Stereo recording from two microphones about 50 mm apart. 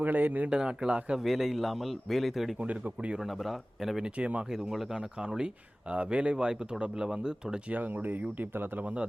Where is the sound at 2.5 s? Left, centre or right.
Right.